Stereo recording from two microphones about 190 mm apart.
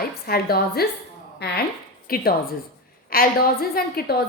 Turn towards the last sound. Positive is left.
turn(degrees=55)  # may be behind; listen again after turning